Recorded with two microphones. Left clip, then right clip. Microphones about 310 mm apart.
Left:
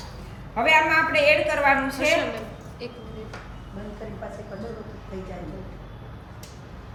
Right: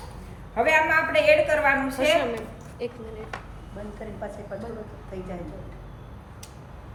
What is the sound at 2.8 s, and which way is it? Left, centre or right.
Speech, right.